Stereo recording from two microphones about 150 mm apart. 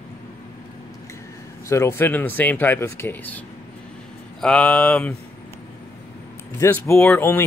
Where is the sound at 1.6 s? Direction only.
20° left (ahead or behind).